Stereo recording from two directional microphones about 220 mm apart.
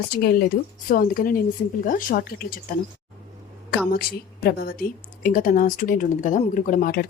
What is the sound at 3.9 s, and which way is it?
Speech, 45° left (ahead or behind).